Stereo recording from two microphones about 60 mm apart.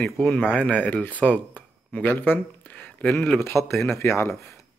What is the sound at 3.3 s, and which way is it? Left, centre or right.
Speech, left.